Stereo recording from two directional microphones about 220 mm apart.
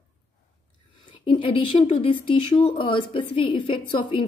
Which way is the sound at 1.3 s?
25° left (ahead or behind).